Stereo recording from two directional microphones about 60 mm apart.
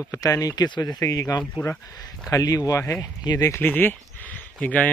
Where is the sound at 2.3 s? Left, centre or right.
Left.